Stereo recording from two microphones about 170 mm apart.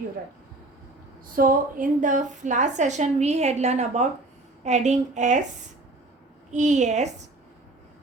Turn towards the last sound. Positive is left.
turn(degrees=-45)  # may be behind; listen again after turning